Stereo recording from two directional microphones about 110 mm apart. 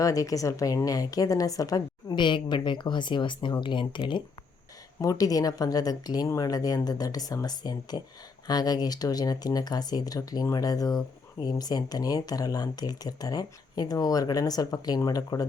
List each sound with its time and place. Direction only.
0.0 s speech: 30° left (ahead or behind); by 4.2 s 45° left (ahead or behind)
4.9 s speech: 35° left (ahead or behind)